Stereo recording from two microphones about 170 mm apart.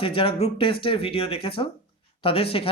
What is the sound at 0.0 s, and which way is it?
Speech, 30° left (ahead or behind).